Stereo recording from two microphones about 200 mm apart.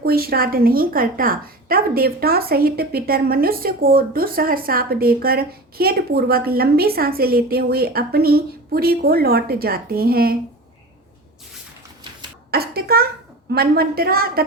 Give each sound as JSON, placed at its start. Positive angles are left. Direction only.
{"t": 0.0, "sound": "a woman's voice", "side_deg": -50}
{"t": 12.5, "sound": "a child's voice", "side_deg": -50}